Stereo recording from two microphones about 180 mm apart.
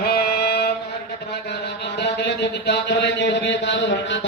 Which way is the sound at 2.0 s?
70° left (ahead or behind).